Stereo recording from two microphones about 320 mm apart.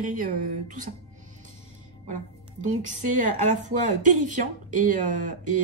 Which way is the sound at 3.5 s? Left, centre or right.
Right.